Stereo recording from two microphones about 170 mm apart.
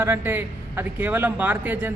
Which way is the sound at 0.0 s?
10° right (ahead or behind).